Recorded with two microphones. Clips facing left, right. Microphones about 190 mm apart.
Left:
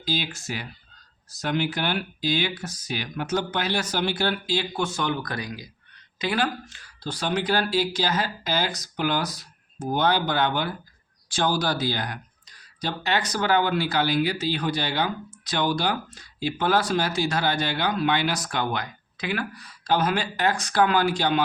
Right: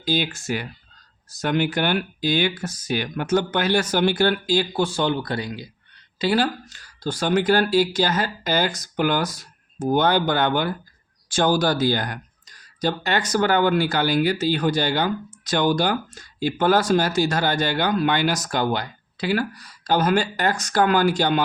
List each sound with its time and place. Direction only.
0.0 s speech: 55° right (ahead or behind)